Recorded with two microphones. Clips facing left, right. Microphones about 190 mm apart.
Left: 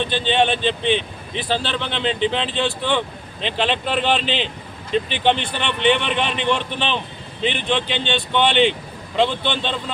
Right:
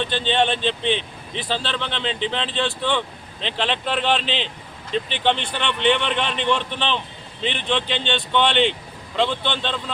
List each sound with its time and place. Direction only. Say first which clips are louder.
0.0 s speech: left 2 dB; 5° left (ahead or behind)